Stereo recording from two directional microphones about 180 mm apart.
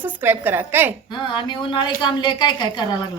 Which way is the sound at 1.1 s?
25° left (ahead or behind).